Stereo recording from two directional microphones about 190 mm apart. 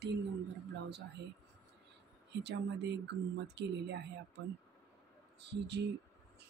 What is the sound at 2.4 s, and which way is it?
Speech, 65° right (ahead or behind).